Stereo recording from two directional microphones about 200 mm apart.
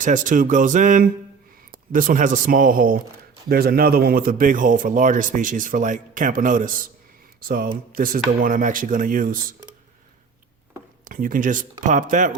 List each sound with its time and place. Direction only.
0.0 s speech: 40° right (ahead or behind)
11.0 s speech: 45° right (ahead or behind)